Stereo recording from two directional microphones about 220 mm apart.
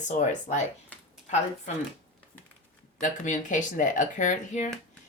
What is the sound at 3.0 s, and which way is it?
Speech, 35° left (ahead or behind).